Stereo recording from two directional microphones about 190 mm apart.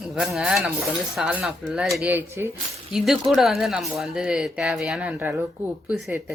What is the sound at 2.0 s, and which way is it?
Speech, 10° right (ahead or behind).